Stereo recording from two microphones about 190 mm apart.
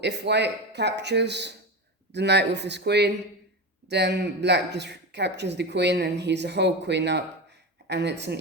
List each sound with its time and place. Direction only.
0.0 s speech: 65° right (ahead or behind)